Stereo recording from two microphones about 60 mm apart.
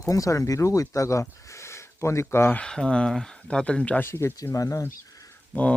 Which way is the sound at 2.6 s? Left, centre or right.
Centre.